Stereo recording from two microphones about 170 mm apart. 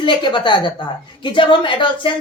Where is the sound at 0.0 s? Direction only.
30° left (ahead or behind).